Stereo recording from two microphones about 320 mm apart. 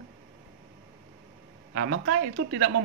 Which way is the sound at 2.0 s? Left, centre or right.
Right.